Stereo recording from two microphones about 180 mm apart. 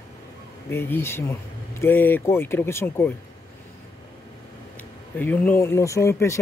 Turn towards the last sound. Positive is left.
turn(degrees=15)  # may be behind; listen again after turning